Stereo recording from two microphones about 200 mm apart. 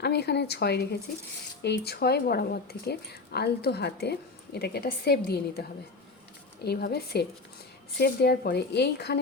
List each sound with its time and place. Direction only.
0.0 s a woman's voice: 55° left (ahead or behind)
6.7 s a woman's voice: 50° left (ahead or behind)